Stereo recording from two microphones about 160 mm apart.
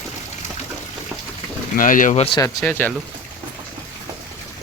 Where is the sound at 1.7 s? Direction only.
55° left (ahead or behind).